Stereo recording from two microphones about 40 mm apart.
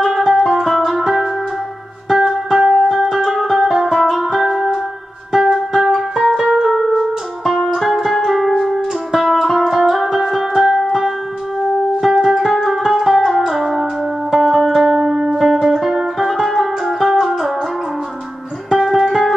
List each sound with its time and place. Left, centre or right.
0.0 s music: centre
5.7 s music: centre
15.0 s music: centre
15.3 s music: centre
18.7 s music: centre